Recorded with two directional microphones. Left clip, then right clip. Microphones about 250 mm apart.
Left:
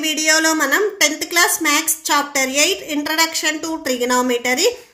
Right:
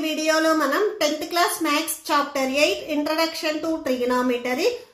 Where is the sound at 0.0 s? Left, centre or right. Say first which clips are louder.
Left 5 dB; left.